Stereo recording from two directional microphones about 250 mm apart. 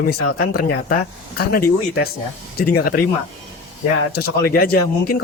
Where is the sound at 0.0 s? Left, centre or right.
Left.